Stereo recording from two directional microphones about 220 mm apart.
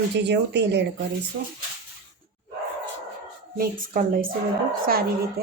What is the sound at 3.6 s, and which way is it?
Speech, 40° right (ahead or behind).